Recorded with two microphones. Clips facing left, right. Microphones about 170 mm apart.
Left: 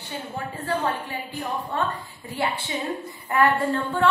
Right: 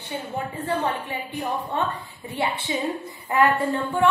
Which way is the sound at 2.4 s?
25° right (ahead or behind).